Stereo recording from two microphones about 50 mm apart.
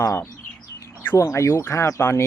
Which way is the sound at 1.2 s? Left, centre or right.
Left.